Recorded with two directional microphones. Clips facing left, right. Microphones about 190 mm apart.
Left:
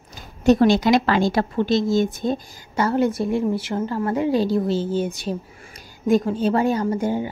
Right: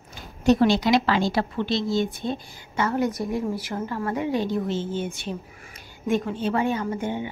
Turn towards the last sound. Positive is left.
turn(degrees=40)  # may be behind; listen again after turning